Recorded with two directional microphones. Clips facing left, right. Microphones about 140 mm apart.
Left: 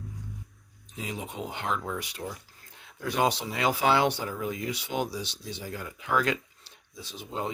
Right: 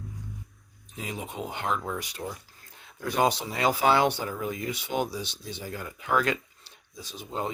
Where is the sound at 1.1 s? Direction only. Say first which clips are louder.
Right 1 dB; 45° right (ahead or behind).